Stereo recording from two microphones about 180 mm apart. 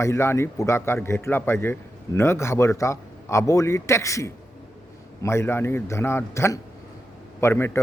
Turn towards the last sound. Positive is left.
turn(degrees=15)  # may be behind; listen again after turning